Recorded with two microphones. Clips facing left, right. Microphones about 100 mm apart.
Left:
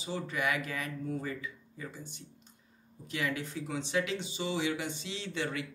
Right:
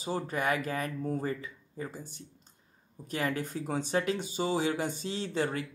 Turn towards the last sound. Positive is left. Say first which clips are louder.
# right 4 dB
turn(degrees=-40)  # may be behind; listen again after turning